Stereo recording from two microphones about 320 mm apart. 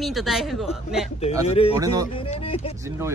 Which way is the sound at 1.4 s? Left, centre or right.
Centre.